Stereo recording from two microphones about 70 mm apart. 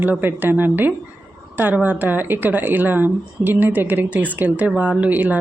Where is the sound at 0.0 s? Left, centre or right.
Right.